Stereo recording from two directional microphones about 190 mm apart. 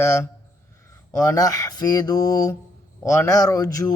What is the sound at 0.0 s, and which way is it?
A man's voice, 15° left (ahead or behind).